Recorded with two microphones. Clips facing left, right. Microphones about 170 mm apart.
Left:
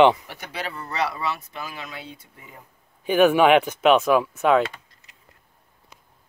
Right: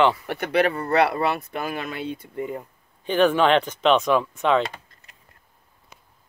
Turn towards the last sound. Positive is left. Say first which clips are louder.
# left 2 dB
turn(degrees=5)  # may be behind; listen again after turning